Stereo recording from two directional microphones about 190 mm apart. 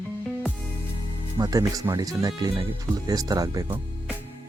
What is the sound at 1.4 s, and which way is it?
Speech, 20° right (ahead or behind).